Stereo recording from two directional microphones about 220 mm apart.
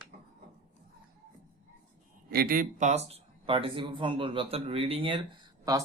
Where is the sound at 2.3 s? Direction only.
40° right (ahead or behind); by 5.8 s 20° right (ahead or behind).